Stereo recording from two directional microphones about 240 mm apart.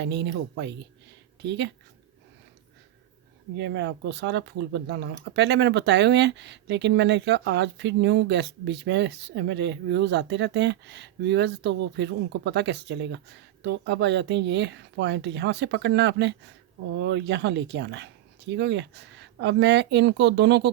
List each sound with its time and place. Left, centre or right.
0.0 s speech: right
3.6 s speech: right